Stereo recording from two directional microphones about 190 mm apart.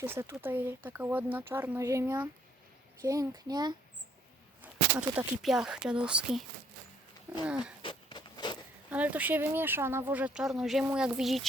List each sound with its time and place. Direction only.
0.0 s a child's voice: 15° right (ahead or behind)
4.6 s speech: 5° right (ahead or behind)
7.4 s speech: 5° right (ahead or behind)
7.8 s a sound: 25° left (ahead or behind)
8.9 s speech: 10° right (ahead or behind)